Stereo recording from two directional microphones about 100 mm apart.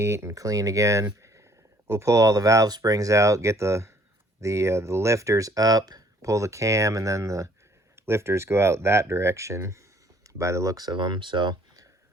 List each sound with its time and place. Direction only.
0.0 s speech: 25° right (ahead or behind); by 11.5 s 50° right (ahead or behind)